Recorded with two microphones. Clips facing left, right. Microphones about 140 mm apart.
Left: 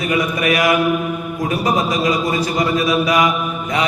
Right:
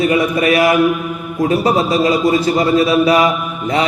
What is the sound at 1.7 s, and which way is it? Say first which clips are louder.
Mantra: right 4 dB; 30° right (ahead or behind).